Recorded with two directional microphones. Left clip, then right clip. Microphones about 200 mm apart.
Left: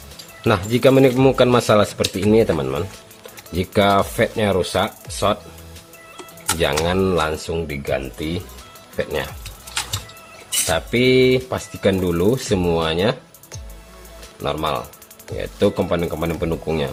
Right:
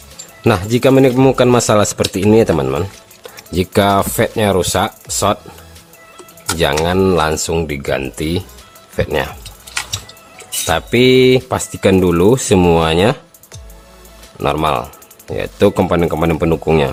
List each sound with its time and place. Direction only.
0.4 s speech: 25° right (ahead or behind)
6.6 s speech: 25° right (ahead or behind); by 8.4 s 45° right (ahead or behind)
9.0 s speech: 30° right (ahead or behind)
10.7 s speech: 30° right (ahead or behind)
14.3 s speech: 35° right (ahead or behind)